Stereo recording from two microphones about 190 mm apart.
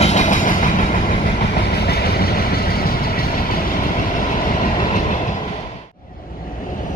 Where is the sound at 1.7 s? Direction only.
55° left (ahead or behind).